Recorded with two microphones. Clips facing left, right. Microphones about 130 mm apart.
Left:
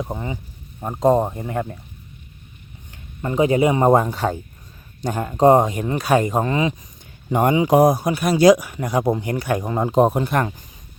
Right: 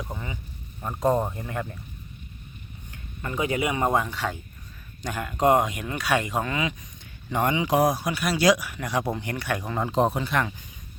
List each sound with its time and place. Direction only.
0.0 s speech: 35° left (ahead or behind)
3.2 s speech: 25° left (ahead or behind)
9.9 s speech: 45° left (ahead or behind)